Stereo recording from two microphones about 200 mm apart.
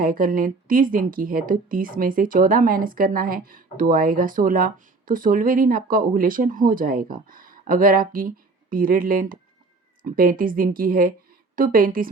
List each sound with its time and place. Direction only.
0.0 s speech: 45° right (ahead or behind)